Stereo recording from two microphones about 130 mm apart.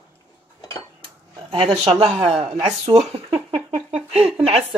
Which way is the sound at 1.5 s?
45° right (ahead or behind).